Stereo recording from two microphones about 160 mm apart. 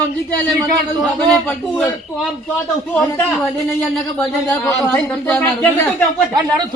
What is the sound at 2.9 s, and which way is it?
Speech, 10° left (ahead or behind).